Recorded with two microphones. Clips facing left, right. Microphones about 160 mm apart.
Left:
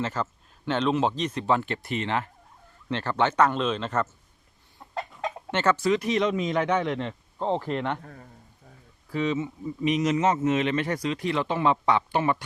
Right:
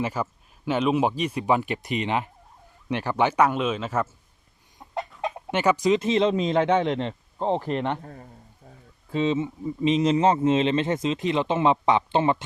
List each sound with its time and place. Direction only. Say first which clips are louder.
0.0 s speech: right 2 dB; 10° right (ahead or behind)
5.2 s speech: right 2 dB; 10° right (ahead or behind)
8.0 s a man's voice: right 3 dB; 35° right (ahead or behind)